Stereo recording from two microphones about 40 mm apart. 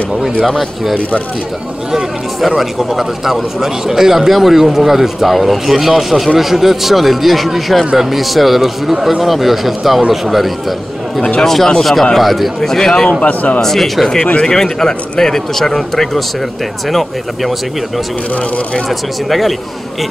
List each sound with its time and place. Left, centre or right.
0.4 s a man's voice: centre
2.5 s a man's voice: centre
11.4 s a man's voice: centre
12.5 s a man's voice: centre
13.2 s speech: left
13.6 s a man's voice: centre
18.9 s a man's voice: centre